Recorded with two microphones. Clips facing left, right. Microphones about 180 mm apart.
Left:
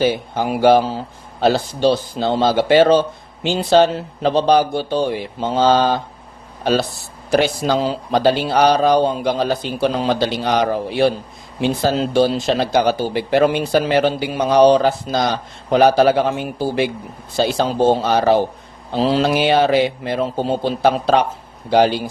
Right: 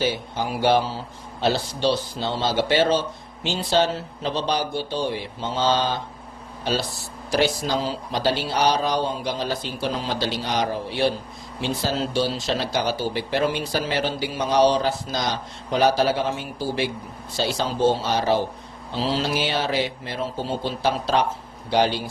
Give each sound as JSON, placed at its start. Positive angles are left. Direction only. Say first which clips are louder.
{"t": 0.0, "sound": "speech", "louder": "left 7 dB", "side_deg": 55}
{"t": 7.3, "sound": "speech", "louder": "left 6 dB", "side_deg": 60}